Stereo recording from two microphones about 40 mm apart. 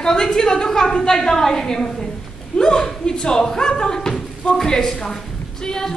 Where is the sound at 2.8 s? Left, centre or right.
Centre.